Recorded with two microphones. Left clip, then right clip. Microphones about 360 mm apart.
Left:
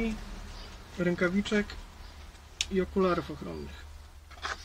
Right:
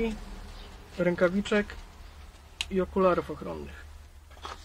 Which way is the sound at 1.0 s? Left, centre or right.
Centre.